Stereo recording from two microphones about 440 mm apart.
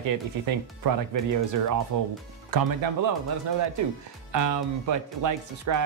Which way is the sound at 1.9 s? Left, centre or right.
Right.